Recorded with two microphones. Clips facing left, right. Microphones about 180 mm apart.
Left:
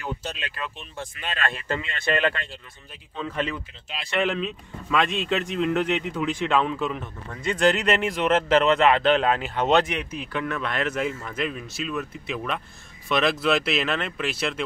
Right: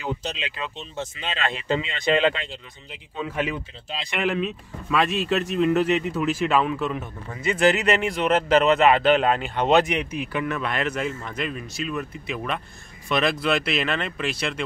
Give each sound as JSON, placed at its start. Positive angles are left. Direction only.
{"t": 0.0, "sound": "speech", "side_deg": -20}
{"t": 3.5, "sound": "speech", "side_deg": -20}